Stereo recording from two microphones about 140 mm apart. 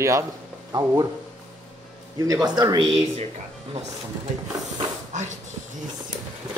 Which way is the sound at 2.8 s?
45° right (ahead or behind).